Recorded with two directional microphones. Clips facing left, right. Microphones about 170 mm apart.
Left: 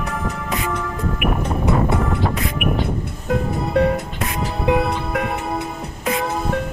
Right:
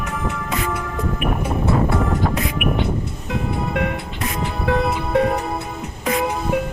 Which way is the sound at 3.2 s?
40° left (ahead or behind).